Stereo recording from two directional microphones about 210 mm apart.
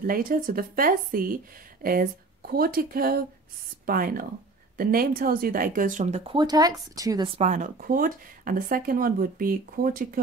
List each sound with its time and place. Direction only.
0.0 s speech: 40° right (ahead or behind); by 7.4 s 20° right (ahead or behind)
7.4 s speech: 35° right (ahead or behind)